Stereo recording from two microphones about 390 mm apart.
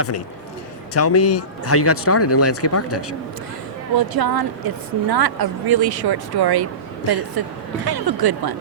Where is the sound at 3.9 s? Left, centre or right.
Right.